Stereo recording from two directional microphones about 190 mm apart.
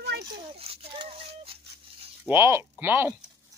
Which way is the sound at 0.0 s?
55° right (ahead or behind).